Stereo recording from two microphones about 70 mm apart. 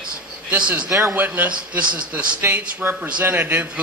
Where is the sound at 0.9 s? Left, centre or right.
Right.